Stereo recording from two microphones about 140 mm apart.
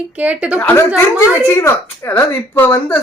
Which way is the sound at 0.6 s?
15° left (ahead or behind).